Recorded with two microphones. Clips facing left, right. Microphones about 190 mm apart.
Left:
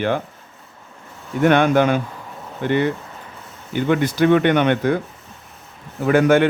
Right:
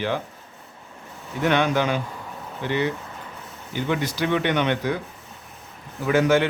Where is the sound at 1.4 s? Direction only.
55° left (ahead or behind).